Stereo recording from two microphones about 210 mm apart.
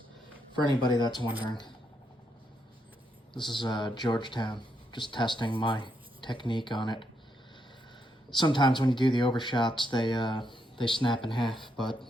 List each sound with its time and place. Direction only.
0.8 s speech: 20° left (ahead or behind)
3.3 s speech: 20° left (ahead or behind)
8.4 s speech: 20° left (ahead or behind)